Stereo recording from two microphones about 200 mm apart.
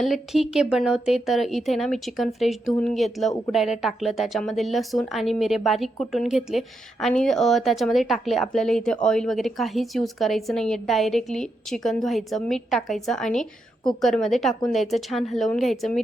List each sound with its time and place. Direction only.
0.0 s speech: centre (ahead or behind)